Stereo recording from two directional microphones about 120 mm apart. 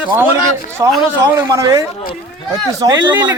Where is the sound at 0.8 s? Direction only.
25° right (ahead or behind).